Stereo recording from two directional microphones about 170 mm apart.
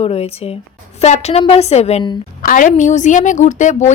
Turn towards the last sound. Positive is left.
turn(degrees=45)  # may be behind; listen again after turning